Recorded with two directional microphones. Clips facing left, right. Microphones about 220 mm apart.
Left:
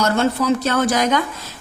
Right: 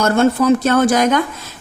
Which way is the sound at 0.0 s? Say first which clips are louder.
Right 5 dB; 50° right (ahead or behind).